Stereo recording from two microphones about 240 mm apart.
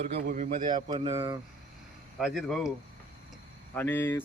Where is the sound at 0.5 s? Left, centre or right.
Centre.